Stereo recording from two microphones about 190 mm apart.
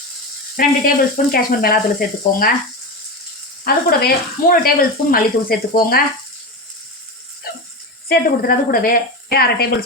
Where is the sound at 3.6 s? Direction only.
55° left (ahead or behind).